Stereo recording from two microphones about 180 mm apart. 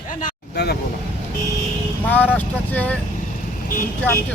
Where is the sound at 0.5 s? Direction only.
65° left (ahead or behind).